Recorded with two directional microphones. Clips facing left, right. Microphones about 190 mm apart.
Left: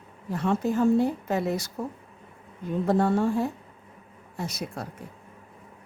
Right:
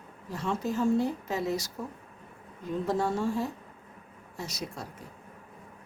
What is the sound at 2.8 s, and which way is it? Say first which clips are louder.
A woman's voice: left 6 dB; 55° left (ahead or behind).